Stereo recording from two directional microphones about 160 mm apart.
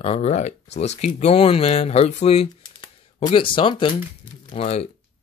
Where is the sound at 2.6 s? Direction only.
30° left (ahead or behind).